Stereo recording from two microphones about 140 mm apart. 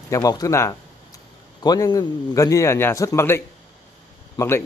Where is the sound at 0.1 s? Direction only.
25° left (ahead or behind).